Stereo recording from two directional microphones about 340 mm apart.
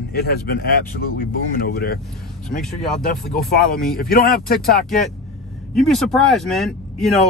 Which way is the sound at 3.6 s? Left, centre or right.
Left.